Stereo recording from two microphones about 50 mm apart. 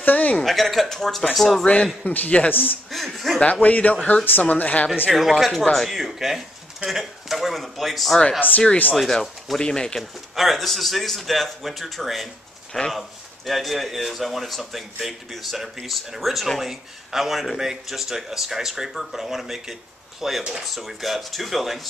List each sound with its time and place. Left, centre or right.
0.0 s speech: left
0.4 s speech: centre
2.0 s a man's voice: left
2.5 s speech: left
2.9 s speech: centre
3.3 s a man's voice: left
5.1 s speech: centre
8.4 s speech: left
8.9 s speech: centre
9.9 s speech: centre